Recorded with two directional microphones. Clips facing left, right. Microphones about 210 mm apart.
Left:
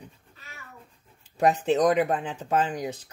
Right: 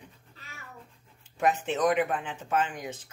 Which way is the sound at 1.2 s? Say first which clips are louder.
Left 5 dB; 35° left (ahead or behind).